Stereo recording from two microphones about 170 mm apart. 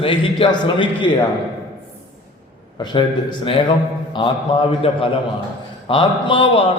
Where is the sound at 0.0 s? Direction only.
30° left (ahead or behind).